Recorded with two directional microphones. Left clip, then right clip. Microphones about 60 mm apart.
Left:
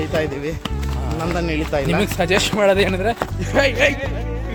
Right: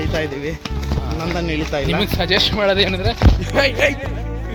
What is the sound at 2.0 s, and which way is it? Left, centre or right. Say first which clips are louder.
Speech: even; left.